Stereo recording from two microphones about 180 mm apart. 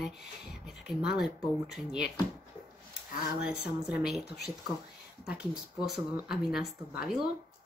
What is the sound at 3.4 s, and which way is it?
Speech, 5° right (ahead or behind).